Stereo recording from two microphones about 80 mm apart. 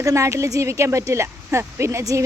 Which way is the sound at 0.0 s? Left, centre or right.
Right.